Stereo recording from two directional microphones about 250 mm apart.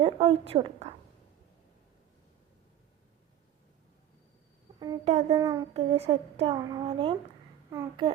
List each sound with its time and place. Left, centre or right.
0.0 s speech: right
4.8 s speech: right